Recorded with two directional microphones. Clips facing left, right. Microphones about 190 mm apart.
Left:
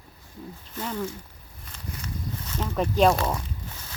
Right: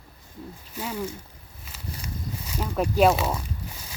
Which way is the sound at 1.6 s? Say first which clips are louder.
Even; 10° right (ahead or behind).